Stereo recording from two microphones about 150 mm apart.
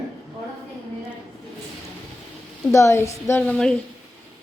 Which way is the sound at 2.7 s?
20° left (ahead or behind).